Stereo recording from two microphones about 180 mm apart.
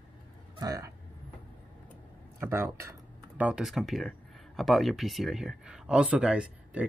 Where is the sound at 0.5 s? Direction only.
20° right (ahead or behind).